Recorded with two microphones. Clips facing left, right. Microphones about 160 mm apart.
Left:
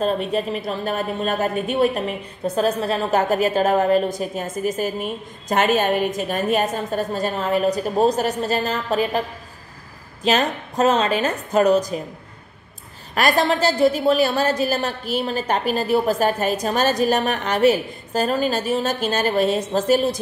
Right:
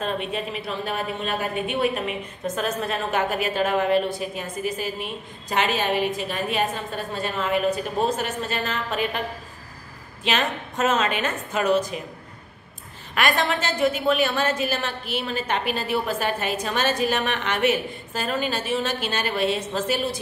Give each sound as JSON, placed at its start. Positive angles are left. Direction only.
{"t": 0.0, "sound": "a woman's voice", "side_deg": 40}
{"t": 10.2, "sound": "a woman's voice", "side_deg": 40}
{"t": 13.1, "sound": "a woman's voice", "side_deg": 35}